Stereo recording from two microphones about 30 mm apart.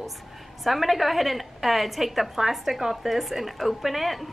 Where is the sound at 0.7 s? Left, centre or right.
Centre.